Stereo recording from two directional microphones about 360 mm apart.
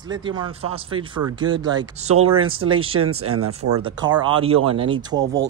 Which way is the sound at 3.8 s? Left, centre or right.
Centre.